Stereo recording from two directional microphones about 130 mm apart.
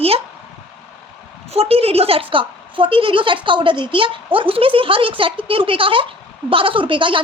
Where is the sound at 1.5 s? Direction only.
50° right (ahead or behind).